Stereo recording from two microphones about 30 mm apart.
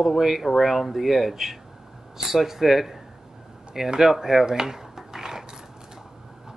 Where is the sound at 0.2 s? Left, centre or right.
Centre.